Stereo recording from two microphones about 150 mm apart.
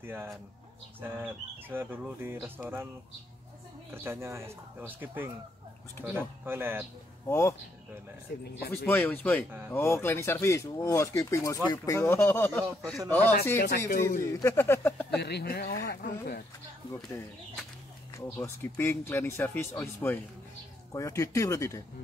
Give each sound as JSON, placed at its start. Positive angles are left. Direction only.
{"t": 0.0, "sound": "speech", "side_deg": -15}
{"t": 3.9, "sound": "speech", "side_deg": -15}
{"t": 7.2, "sound": "speech", "side_deg": 20}
{"t": 8.5, "sound": "speech", "side_deg": 90}
{"t": 8.8, "sound": "speech", "side_deg": 15}
{"t": 13.6, "sound": "speech", "side_deg": 75}
{"t": 14.2, "sound": "speech", "side_deg": 20}
{"t": 15.1, "sound": "speech", "side_deg": 90}
{"t": 15.7, "sound": "speech", "side_deg": 80}
{"t": 18.1, "sound": "speech", "side_deg": 20}